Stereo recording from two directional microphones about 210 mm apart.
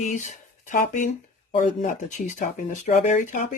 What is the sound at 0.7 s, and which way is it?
Speech, 35° left (ahead or behind).